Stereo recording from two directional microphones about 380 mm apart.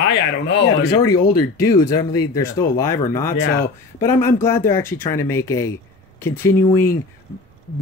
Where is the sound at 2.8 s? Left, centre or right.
Centre.